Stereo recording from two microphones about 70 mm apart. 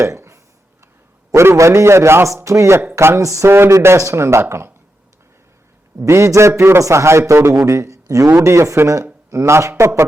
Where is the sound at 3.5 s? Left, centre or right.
Right.